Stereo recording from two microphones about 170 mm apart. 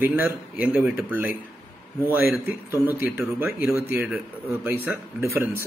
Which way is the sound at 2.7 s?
10° right (ahead or behind).